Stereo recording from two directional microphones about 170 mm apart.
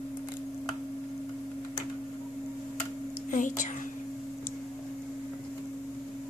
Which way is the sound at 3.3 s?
50° left (ahead or behind).